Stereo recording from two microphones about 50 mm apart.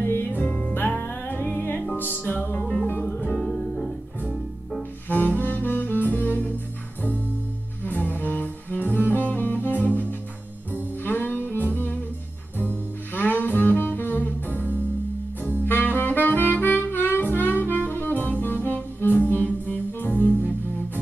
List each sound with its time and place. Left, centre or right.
0.0 s music: left
2.6 s music: centre
2.9 s music: left
3.3 s music: centre
5.1 s saxophone: left
7.8 s bowed string instrument: left
10.7 s music: left
12.5 s double bass: left
15.4 s music: left